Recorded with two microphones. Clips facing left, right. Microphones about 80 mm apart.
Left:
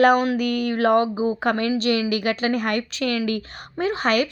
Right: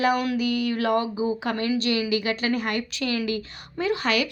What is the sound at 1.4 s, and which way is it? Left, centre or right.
Speech, left.